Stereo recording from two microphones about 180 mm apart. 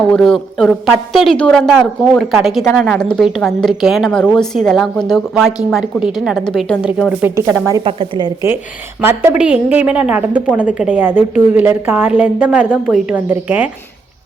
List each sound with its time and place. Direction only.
0.1 s a woman's voice: centre (ahead or behind)
7.9 s a woman's voice: 30° right (ahead or behind)
9.0 s a woman's voice: 10° right (ahead or behind)